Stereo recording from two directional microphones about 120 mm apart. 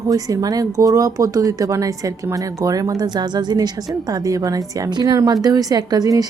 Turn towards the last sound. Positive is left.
turn(degrees=-30)  # may be behind; listen again after turning